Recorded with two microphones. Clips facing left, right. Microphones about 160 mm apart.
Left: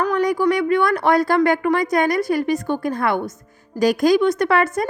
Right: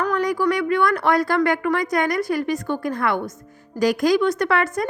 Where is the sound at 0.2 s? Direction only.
25° left (ahead or behind).